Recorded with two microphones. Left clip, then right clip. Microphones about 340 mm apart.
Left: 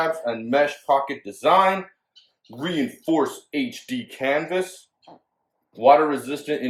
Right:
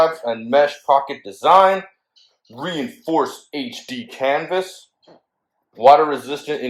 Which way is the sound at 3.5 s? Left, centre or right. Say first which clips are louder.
Even; centre.